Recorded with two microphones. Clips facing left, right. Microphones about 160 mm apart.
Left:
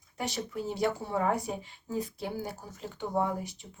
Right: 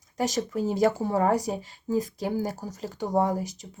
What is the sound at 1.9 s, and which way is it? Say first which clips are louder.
Speech: right 7 dB; 90° right.